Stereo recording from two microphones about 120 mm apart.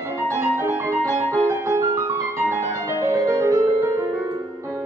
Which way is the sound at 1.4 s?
25° right (ahead or behind).